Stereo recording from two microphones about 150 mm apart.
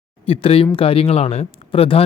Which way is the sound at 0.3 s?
40° left (ahead or behind).